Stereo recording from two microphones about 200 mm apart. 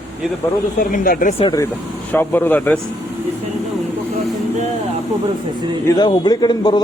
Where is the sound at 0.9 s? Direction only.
45° left (ahead or behind).